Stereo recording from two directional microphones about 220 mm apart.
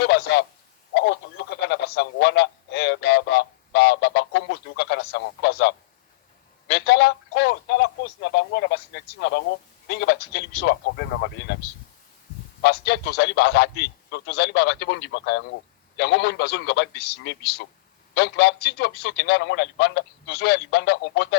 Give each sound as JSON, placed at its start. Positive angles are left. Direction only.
{"t": 0.0, "sound": "a sound", "side_deg": 50}
{"t": 1.6, "sound": "a man's voice", "side_deg": 50}
{"t": 12.6, "sound": "a man's voice", "side_deg": 50}